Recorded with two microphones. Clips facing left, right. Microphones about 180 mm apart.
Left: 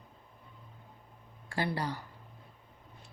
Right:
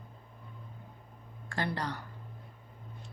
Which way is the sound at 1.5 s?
10° left (ahead or behind).